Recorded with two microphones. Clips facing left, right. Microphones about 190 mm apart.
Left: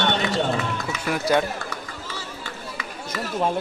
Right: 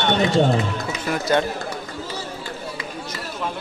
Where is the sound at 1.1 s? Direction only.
5° left (ahead or behind).